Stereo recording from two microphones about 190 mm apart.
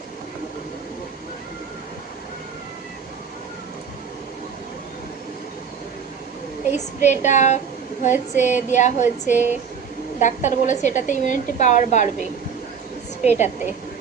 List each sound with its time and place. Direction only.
6.7 s a woman's voice: 40° left (ahead or behind)
9.3 s speech: 10° right (ahead or behind)
10.2 s a woman's voice: 40° left (ahead or behind)
13.2 s a woman's voice: 40° left (ahead or behind)